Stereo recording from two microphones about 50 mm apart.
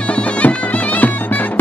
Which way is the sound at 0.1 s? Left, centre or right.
Left.